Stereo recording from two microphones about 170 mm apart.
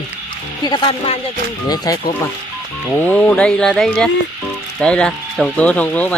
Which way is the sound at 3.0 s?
10° left (ahead or behind).